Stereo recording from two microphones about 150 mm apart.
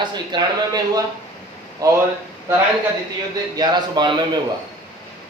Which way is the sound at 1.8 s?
20° right (ahead or behind).